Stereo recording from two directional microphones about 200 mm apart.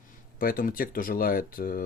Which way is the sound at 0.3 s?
45° left (ahead or behind).